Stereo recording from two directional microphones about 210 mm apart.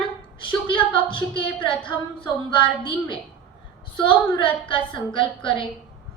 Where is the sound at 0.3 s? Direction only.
25° left (ahead or behind).